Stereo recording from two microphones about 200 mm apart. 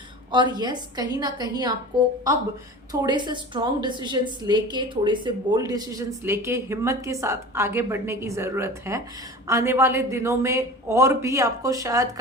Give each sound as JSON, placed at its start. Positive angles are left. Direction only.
{"t": 0.3, "sound": "a woman's voice", "side_deg": -20}
{"t": 2.9, "sound": "a woman's voice", "side_deg": -20}